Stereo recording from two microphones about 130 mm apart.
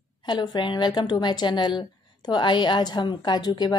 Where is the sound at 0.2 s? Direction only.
35° left (ahead or behind).